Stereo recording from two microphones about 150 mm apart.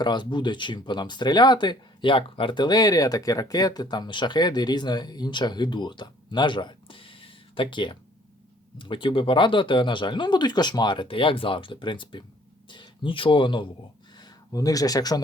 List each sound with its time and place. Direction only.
0.0 s speech: 30° left (ahead or behind)